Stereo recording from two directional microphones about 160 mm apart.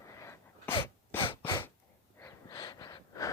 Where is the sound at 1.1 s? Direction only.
30° left (ahead or behind).